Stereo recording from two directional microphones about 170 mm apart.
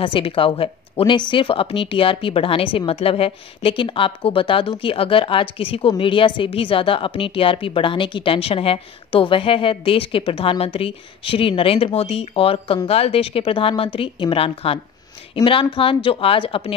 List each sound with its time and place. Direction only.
0.0 s speech: 30° left (ahead or behind)